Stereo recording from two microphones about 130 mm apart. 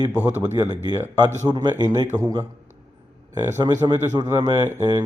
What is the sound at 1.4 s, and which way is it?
A man's voice, 30° right (ahead or behind).